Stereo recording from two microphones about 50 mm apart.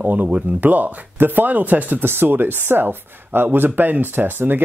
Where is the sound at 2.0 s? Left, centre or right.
Right.